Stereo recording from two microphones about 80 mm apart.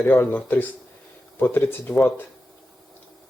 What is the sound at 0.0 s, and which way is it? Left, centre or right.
A man's voice, left.